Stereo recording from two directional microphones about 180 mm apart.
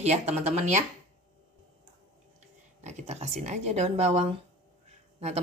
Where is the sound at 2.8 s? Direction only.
40° right (ahead or behind).